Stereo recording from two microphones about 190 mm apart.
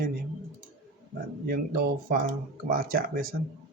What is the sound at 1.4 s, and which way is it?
Speech, 55° right (ahead or behind).